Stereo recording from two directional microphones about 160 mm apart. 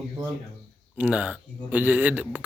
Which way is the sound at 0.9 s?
10° right (ahead or behind).